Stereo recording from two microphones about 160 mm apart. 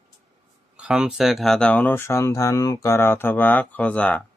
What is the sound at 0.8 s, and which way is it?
Speech, 5° right (ahead or behind).